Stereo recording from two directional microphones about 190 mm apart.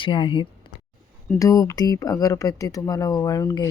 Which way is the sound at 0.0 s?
25° left (ahead or behind).